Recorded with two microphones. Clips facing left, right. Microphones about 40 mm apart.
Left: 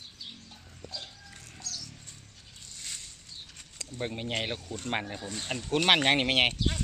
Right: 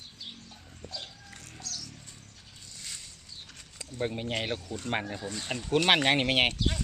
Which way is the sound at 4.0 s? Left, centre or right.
Centre.